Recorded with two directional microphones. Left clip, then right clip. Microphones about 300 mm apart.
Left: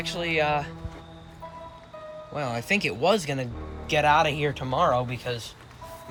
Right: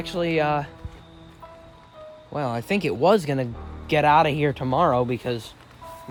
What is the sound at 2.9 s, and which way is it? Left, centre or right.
Speech, right.